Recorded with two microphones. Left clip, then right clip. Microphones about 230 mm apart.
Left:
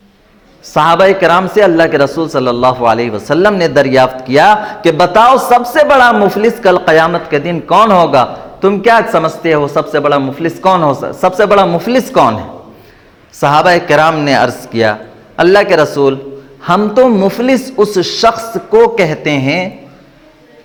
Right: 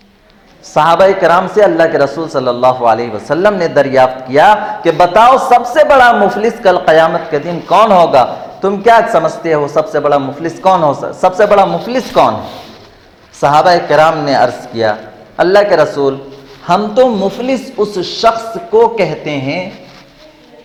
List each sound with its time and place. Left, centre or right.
0.7 s a man's voice: left
13.4 s a man's voice: left